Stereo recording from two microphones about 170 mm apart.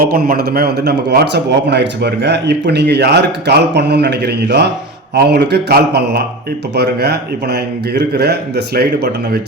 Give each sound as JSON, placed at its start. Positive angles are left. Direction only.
{"t": 0.0, "sound": "a man's voice", "side_deg": -60}